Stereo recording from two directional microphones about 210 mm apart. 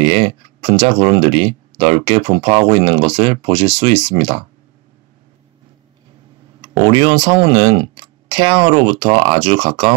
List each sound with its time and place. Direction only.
0.0 s speech: 25° right (ahead or behind)
6.6 s speech: 25° right (ahead or behind)